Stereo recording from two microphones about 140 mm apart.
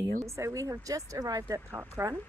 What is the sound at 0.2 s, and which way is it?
Speech, 20° right (ahead or behind).